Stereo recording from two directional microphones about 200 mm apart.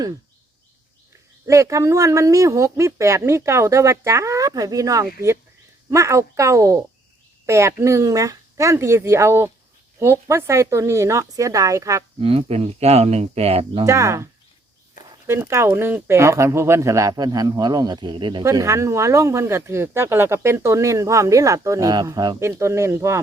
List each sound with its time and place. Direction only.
1.5 s speech: 15° right (ahead or behind)
12.2 s speech: 30° right (ahead or behind)
13.8 s speech: 15° right (ahead or behind)
15.3 s speech: 15° right (ahead or behind)